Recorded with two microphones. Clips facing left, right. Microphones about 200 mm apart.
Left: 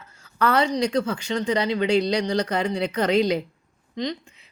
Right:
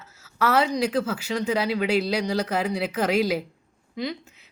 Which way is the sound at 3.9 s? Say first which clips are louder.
Left 2 dB; 5° right (ahead or behind).